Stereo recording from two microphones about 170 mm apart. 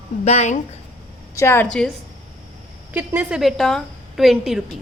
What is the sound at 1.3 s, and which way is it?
Speech, 15° left (ahead or behind).